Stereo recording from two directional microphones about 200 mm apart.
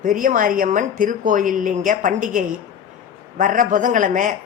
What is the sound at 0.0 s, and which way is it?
A woman's voice, 45° right (ahead or behind).